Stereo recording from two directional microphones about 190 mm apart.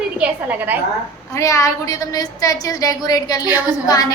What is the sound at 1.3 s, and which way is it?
A woman's voice, 15° left (ahead or behind).